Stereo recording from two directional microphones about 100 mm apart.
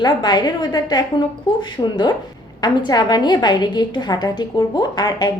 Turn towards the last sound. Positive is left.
turn(degrees=40)  # may be behind; listen again after turning